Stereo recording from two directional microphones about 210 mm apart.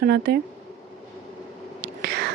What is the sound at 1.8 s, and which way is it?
Whispering, 50° right (ahead or behind).